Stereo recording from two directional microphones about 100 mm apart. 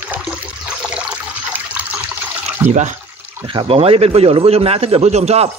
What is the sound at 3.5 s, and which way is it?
A man's voice, 65° right (ahead or behind).